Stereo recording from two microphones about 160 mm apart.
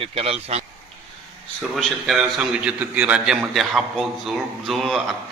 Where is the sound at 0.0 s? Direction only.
40° right (ahead or behind).